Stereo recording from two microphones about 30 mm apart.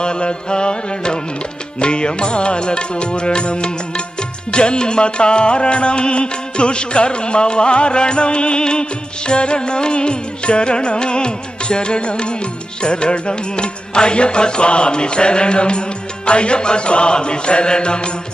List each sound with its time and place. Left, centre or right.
0.0 s music: left